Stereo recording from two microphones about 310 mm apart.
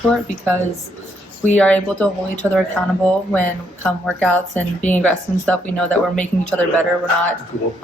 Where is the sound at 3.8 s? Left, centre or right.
Centre.